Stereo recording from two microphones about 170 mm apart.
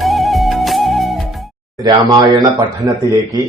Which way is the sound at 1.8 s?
25° right (ahead or behind).